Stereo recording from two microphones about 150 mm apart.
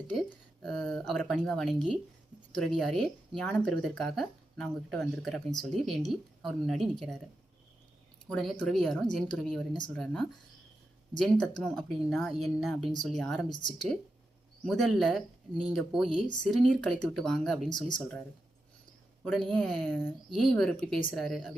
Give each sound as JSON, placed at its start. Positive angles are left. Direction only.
{"t": 0.1, "sound": "speech", "side_deg": 0}
{"t": 8.3, "sound": "speech", "side_deg": 5}
{"t": 13.5, "sound": "speech", "side_deg": 30}
{"t": 14.6, "sound": "speech", "side_deg": 0}
{"t": 19.2, "sound": "speech", "side_deg": 5}